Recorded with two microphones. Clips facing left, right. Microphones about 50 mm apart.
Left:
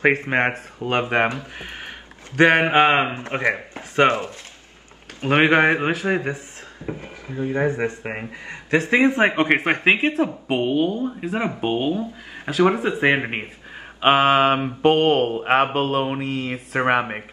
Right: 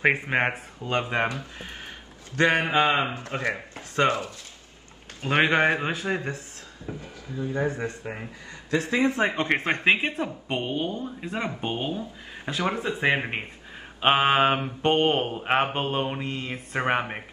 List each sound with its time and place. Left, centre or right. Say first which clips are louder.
0.3 s mantra: left 4 dB; centre
0.7 s speech: left 6 dB; left
6.9 s speech: left 5 dB; left
9.6 s speech: left 4 dB; centre
11.7 s speech: left 7 dB; left
12.5 s speech: left 9 dB; centre
12.8 s speech: left 5 dB; left
14.0 s mantra: left 4 dB; centre
15.3 s speech: left 6 dB; centre
16.2 s mantra: left 6 dB; centre